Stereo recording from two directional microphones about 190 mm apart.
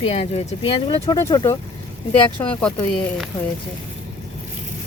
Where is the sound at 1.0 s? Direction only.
20° left (ahead or behind).